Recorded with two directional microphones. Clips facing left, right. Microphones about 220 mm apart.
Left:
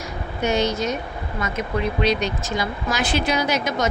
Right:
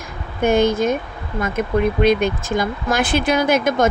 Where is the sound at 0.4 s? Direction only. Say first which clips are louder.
Right 6 dB; 55° right (ahead or behind).